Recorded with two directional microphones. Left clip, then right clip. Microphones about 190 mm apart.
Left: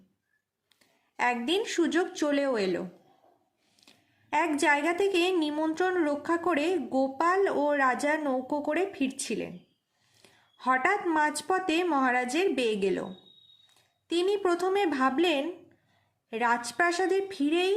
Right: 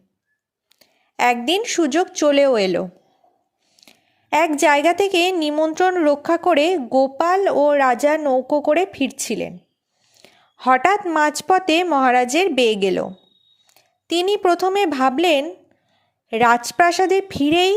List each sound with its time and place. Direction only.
0.7 s a woman's voice: 45° right (ahead or behind)
10.2 s a sound: 40° right (ahead or behind)
11.1 s a woman's voice: 45° right (ahead or behind)
14.1 s a woman's voice: 45° right (ahead or behind)